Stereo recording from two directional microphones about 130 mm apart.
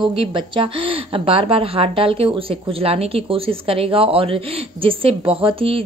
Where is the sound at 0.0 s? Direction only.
40° right (ahead or behind).